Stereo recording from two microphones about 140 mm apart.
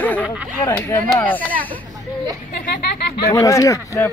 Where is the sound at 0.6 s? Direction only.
15° left (ahead or behind).